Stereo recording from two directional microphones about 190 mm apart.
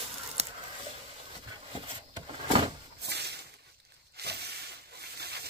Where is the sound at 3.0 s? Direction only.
60° right (ahead or behind).